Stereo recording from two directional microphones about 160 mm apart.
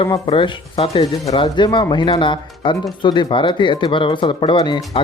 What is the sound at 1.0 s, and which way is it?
Speech, 20° left (ahead or behind).